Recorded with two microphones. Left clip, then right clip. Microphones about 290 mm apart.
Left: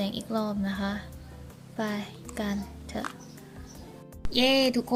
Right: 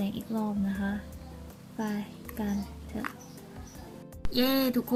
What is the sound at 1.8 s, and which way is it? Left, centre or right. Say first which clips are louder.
Speech: left 3 dB; centre.